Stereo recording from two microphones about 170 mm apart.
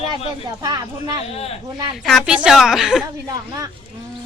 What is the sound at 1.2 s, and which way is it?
Speech, 35° left (ahead or behind).